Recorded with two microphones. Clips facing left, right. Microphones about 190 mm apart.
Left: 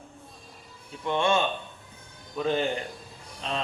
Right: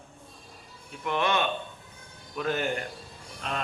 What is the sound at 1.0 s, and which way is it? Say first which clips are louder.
A man's voice: left 2 dB; 25° left (ahead or behind).